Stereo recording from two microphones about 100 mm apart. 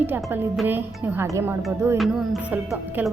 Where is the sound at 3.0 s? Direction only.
20° right (ahead or behind).